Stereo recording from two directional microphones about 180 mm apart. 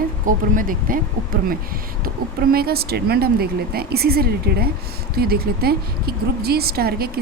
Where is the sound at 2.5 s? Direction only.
60° right (ahead or behind).